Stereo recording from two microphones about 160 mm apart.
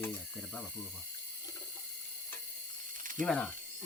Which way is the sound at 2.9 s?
55° right (ahead or behind).